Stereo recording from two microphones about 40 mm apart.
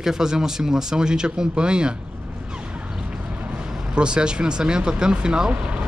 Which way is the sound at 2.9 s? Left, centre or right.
Right.